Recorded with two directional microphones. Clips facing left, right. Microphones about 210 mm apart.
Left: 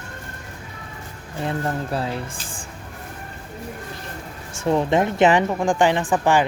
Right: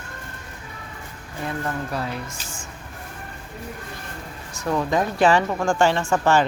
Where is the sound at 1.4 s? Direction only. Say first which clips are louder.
Left 3 dB; 30° left (ahead or behind).